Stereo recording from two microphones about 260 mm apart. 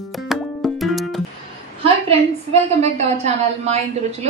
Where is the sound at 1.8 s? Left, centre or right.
Right.